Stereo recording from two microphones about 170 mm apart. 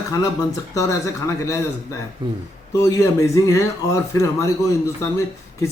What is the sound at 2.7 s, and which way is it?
Speech, 15° left (ahead or behind).